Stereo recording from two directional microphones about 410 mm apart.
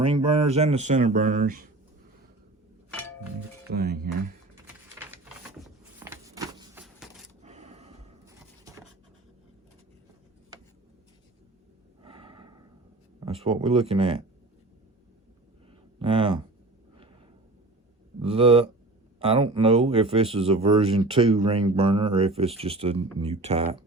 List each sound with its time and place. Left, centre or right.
0.0 s speech: centre
3.7 s speech: right
5.6 s music: centre
7.4 s a sound: centre
12.0 s gasp: centre
13.1 s speech: centre
16.0 s speech: centre
18.2 s speech: centre